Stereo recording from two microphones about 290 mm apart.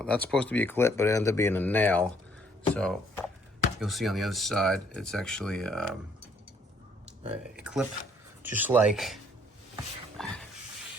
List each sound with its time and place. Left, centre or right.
0.0 s speech: centre
7.6 s speech: centre
10.2 s a sound: centre